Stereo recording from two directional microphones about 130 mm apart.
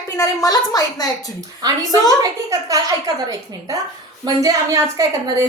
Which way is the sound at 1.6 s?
30° right (ahead or behind).